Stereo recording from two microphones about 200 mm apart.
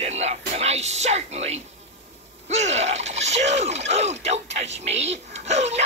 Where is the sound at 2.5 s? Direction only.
35° right (ahead or behind).